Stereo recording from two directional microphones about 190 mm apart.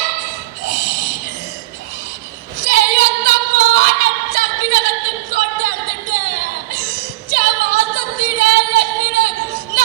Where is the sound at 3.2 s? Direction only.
50° right (ahead or behind).